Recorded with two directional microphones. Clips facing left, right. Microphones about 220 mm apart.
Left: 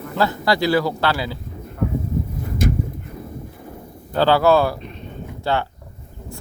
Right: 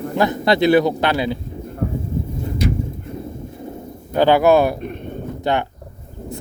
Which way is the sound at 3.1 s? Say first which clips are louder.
Right 4 dB; 25° right (ahead or behind).